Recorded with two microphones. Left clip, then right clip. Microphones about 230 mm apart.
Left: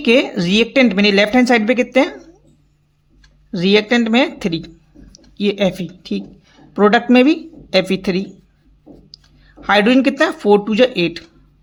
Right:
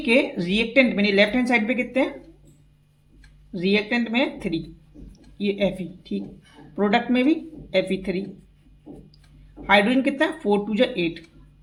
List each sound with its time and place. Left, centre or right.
0.0 s speech: left
3.5 s speech: left
9.6 s speech: left